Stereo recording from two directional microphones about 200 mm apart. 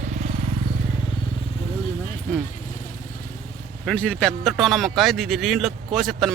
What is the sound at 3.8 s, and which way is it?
A man's voice, 5° left (ahead or behind).